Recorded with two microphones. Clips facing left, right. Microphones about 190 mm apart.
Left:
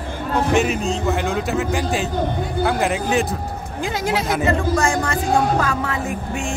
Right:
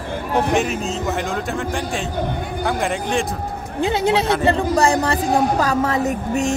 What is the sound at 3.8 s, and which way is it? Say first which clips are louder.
Speech: right 5 dB; 25° right (ahead or behind).